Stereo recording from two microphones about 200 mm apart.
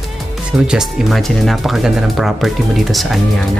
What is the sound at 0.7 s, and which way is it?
Speech, centre (ahead or behind).